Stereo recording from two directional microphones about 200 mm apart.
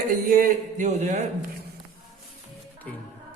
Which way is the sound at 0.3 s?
45° right (ahead or behind).